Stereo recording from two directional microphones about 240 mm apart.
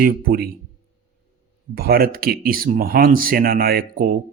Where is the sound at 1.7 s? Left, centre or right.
Right.